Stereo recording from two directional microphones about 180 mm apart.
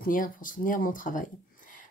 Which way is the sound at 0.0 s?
50° left (ahead or behind).